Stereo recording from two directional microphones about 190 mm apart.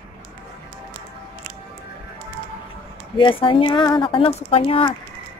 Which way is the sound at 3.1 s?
25° left (ahead or behind).